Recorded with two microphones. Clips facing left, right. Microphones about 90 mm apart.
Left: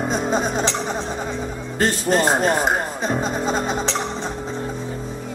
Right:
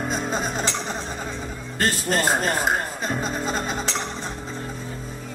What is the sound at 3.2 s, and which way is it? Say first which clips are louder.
Music: left 4 dB; 5° left (ahead or behind).